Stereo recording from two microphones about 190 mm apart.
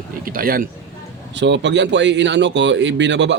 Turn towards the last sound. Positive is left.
turn(degrees=-70)  # may be behind; listen again after turning